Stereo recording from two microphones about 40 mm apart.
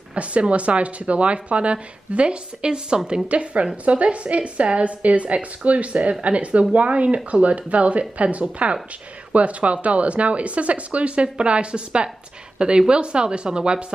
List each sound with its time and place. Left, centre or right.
0.1 s speech: right